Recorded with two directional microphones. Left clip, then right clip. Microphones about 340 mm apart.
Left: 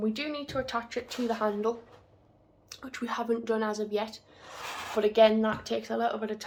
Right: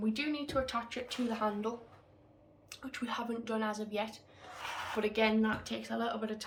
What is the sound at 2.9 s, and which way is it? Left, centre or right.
A woman's voice, centre.